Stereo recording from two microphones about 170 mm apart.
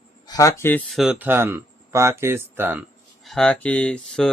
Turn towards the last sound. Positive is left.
turn(degrees=5)  # may be behind; listen again after turning